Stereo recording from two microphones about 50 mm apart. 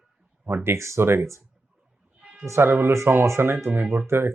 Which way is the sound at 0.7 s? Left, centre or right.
Right.